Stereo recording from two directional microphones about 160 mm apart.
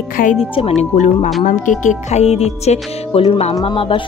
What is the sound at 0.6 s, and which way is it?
Speech, 45° left (ahead or behind).